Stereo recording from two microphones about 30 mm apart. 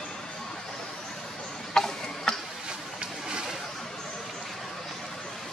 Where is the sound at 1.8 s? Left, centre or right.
Centre.